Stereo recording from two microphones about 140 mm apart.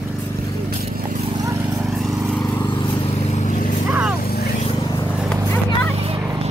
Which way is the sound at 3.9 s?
10° right (ahead or behind).